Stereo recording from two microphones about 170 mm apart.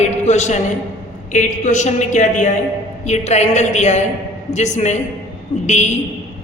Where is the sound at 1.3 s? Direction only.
45° left (ahead or behind).